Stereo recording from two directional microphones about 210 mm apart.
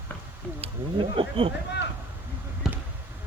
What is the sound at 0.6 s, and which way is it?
Speech, 25° right (ahead or behind).